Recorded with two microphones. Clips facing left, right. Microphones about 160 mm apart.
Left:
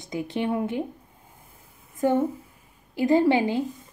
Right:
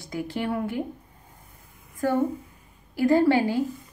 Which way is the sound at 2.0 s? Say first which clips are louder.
Left 1 dB; 20° left (ahead or behind).